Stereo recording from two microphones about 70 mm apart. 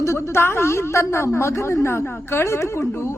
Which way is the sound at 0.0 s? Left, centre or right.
Left.